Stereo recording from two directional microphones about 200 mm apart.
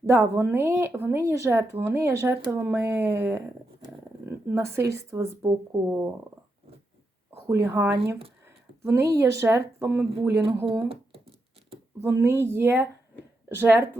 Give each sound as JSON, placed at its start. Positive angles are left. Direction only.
{"t": 0.0, "sound": "speech", "side_deg": -15}
{"t": 4.4, "sound": "speech", "side_deg": -15}
{"t": 7.4, "sound": "speech", "side_deg": -10}
{"t": 10.7, "sound": "a sound", "side_deg": -30}
{"t": 12.0, "sound": "speech", "side_deg": -15}